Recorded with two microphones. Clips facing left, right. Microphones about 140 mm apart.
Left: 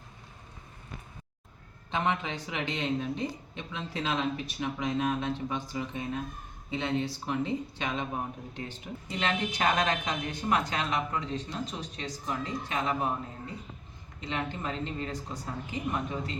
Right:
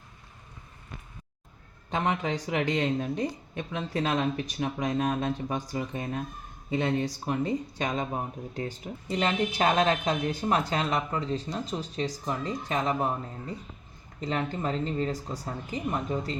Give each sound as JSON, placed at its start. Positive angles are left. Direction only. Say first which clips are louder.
{"t": 1.9, "sound": "speech", "louder": "right 2 dB", "side_deg": -40}
{"t": 14.2, "sound": "speech", "louder": "right 4 dB", "side_deg": -40}